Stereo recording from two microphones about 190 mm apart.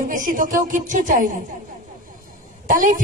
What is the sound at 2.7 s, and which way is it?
Speech, 45° right (ahead or behind).